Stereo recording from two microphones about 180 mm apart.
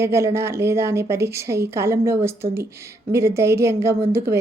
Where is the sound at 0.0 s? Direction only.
15° right (ahead or behind).